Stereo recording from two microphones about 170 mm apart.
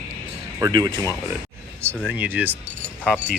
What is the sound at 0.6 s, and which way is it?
Speech, 25° right (ahead or behind).